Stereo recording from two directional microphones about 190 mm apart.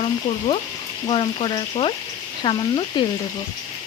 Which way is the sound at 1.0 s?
30° left (ahead or behind).